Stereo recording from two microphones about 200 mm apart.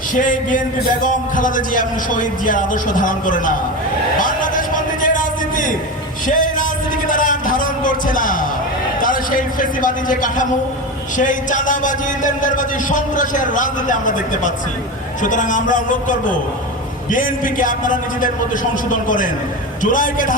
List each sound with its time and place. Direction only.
0.1 s a man's voice: 40° left (ahead or behind)
4.2 s a sound: 40° left (ahead or behind)
9.0 s a man's voice: 45° left (ahead or behind)